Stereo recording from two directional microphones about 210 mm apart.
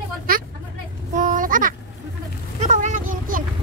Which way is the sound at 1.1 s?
40° right (ahead or behind).